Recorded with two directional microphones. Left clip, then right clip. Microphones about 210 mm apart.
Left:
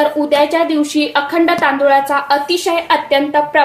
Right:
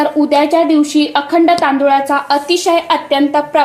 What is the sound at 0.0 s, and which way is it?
A woman's voice, 15° right (ahead or behind).